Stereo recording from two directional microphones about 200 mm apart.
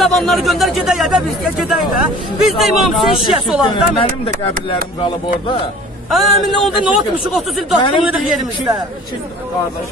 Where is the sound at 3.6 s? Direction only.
25° left (ahead or behind).